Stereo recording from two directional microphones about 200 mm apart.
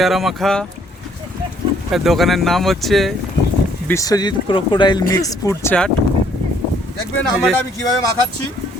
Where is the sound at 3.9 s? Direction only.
15° left (ahead or behind).